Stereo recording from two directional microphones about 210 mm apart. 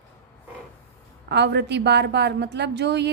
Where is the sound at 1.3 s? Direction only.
55° right (ahead or behind).